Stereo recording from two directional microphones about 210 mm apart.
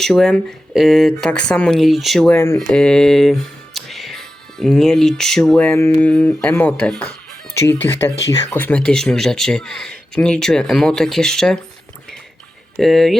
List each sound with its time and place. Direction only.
0.0 s speech: centre (ahead or behind)
12.7 s speech: centre (ahead or behind)